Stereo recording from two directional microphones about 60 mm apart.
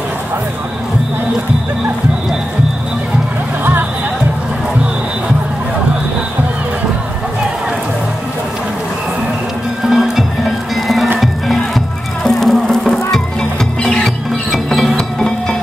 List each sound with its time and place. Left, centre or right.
9.8 s music: centre